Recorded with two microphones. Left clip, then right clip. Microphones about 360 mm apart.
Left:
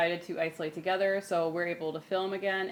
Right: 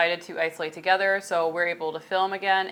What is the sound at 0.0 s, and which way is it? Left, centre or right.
Speech, right.